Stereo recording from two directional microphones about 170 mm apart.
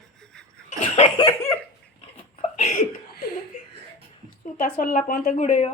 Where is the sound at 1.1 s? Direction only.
20° left (ahead or behind).